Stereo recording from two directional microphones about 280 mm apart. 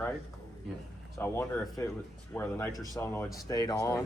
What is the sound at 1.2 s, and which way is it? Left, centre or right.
Speech, centre.